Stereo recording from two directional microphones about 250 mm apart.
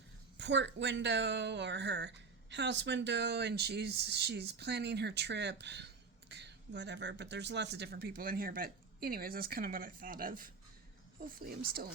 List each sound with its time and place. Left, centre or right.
0.3 s speech: right